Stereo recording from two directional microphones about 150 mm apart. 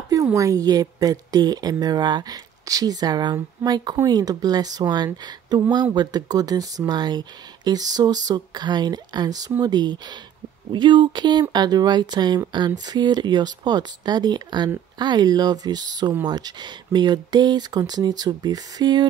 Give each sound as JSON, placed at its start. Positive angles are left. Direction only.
{"t": 0.1, "sound": "speech", "side_deg": -20}